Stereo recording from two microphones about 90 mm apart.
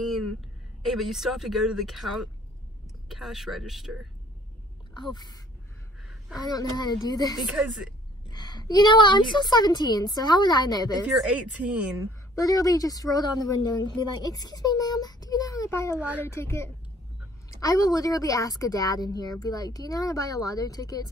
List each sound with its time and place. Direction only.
0.0 s a woman's voice: centre (ahead or behind)
5.1 s speech: 50° left (ahead or behind)
7.3 s a woman's voice: 5° right (ahead or behind)
8.3 s speech: 50° left (ahead or behind)
11.1 s speech: 10° right (ahead or behind)
12.4 s a woman's voice: 40° left (ahead or behind)